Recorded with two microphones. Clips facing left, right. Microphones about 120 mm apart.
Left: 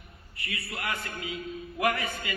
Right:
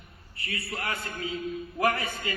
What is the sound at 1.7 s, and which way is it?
Chant, 30° right (ahead or behind).